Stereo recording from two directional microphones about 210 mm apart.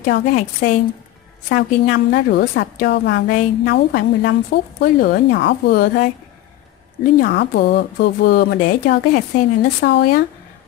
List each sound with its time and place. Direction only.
0.0 s a woman's voice: 45° left (ahead or behind)
7.2 s a woman's voice: 50° left (ahead or behind)